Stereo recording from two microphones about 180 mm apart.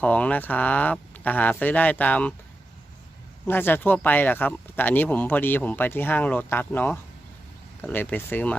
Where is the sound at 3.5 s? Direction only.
10° left (ahead or behind).